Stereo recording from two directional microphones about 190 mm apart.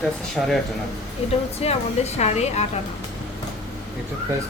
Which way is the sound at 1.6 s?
35° left (ahead or behind).